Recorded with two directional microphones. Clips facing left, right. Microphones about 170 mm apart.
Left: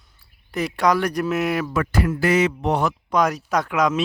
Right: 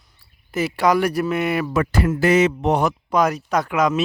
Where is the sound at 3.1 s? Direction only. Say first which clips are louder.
Right 1 dB; centre (ahead or behind).